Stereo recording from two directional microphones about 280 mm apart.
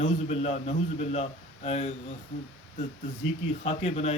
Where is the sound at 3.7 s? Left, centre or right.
Left.